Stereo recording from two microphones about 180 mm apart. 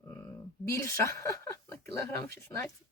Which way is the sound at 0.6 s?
15° left (ahead or behind).